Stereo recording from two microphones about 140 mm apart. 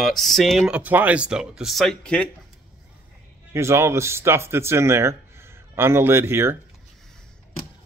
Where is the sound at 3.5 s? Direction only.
20° right (ahead or behind).